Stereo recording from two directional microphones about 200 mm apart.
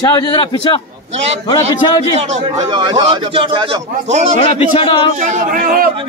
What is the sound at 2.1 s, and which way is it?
Singing, 35° right (ahead or behind).